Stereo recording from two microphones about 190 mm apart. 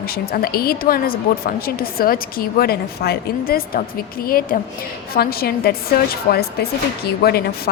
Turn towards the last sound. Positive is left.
turn(degrees=55)  # may be behind; listen again after turning